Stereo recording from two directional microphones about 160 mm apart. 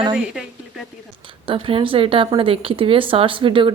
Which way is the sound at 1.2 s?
30° right (ahead or behind).